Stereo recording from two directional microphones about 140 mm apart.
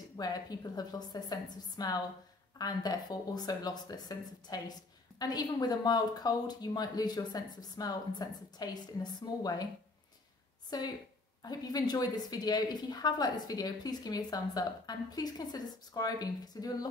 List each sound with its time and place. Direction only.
0.2 s speech: 30° left (ahead or behind)
10.7 s speech: 30° left (ahead or behind)